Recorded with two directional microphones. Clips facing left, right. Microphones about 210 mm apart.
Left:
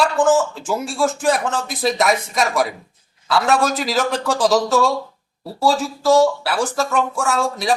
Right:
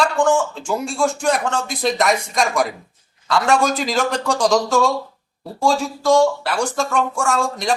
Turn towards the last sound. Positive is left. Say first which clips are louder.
# even
turn(degrees=0)  # may be behind; listen again after turning